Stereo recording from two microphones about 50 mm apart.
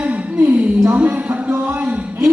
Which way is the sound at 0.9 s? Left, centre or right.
Right.